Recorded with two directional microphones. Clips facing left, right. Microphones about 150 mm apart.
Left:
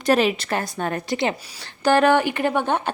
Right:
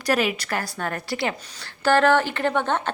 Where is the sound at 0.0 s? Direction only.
25° left (ahead or behind).